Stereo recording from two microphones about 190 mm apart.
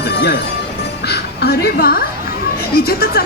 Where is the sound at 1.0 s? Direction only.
60° left (ahead or behind).